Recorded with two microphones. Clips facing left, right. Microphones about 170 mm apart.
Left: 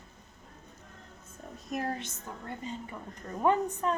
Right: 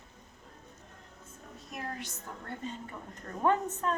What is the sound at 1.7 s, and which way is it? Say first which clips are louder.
Speech: left 7 dB; 45° left (ahead or behind).